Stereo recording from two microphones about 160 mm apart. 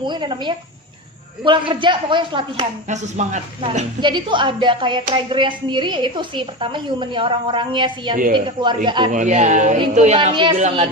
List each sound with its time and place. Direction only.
0.0 s speech: 30° right (ahead or behind)
2.9 s speech: 45° right (ahead or behind)
4.0 s speech: 30° right (ahead or behind)
8.1 s a woman's voice: 60° right (ahead or behind)
8.4 s speech: 30° right (ahead or behind)
9.0 s speech: 50° right (ahead or behind)
10.3 s speech: 30° right (ahead or behind)